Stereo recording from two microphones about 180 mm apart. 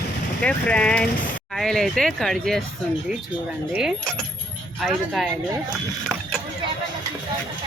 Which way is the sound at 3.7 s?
5° right (ahead or behind).